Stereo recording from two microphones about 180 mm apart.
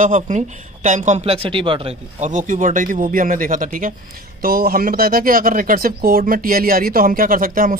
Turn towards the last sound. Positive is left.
turn(degrees=-50)  # may be behind; listen again after turning